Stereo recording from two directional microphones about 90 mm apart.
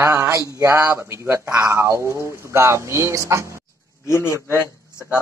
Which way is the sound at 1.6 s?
30° right (ahead or behind).